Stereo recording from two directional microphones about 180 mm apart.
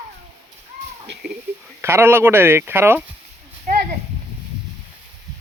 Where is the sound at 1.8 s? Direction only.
15° right (ahead or behind).